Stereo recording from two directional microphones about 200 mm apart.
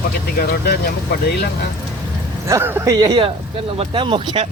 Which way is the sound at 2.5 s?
10° right (ahead or behind).